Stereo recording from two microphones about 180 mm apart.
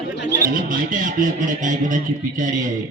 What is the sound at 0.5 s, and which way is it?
A man's voice, 50° right (ahead or behind).